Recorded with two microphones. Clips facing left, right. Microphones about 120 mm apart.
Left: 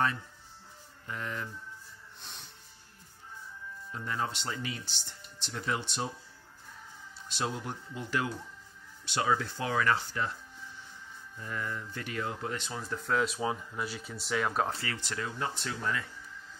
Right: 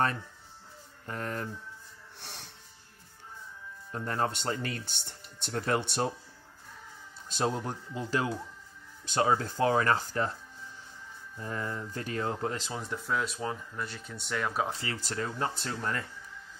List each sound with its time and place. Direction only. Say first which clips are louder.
1.0 s speech: right 3 dB; 45° right (ahead or behind)
2.1 s music: right 4 dB; 75° right (ahead or behind)
3.9 s speech: right 4 dB; 45° right (ahead or behind)
7.3 s speech: right 4 dB; 35° right (ahead or behind)
11.3 s speech: right 2 dB; 30° right (ahead or behind)
12.7 s speech: right 1 dB; 10° right (ahead or behind)
13.1 s speech: left 3 dB; centre (ahead or behind)
15.0 s speech: right 3 dB; 40° right (ahead or behind)